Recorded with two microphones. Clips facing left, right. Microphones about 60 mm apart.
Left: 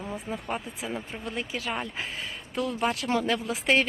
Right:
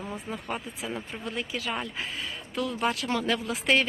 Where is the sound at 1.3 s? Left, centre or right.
Left.